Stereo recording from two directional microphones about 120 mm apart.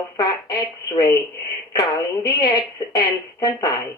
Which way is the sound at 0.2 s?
30° left (ahead or behind).